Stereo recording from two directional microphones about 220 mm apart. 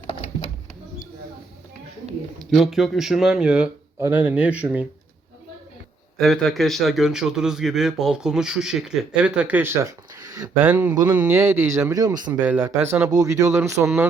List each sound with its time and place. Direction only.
0.1 s a sound: 25° left (ahead or behind)
2.4 s a man's voice: centre (ahead or behind)
6.1 s a man's voice: centre (ahead or behind)